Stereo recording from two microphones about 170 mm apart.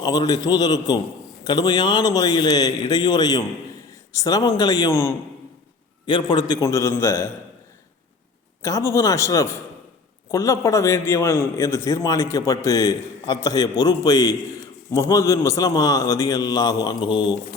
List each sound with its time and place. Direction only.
0.0 s a man's voice: 25° left (ahead or behind)
8.6 s a man's voice: 15° left (ahead or behind)